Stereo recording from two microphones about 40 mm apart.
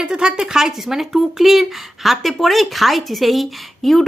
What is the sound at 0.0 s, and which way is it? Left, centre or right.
Speech, centre.